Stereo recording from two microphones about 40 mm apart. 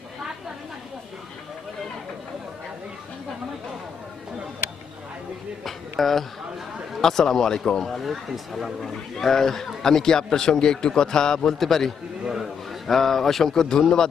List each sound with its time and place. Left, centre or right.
5.6 s a sound: centre
7.0 s a man's voice: centre
7.9 s speech: centre
9.1 s a man's voice: centre
12.9 s a man's voice: centre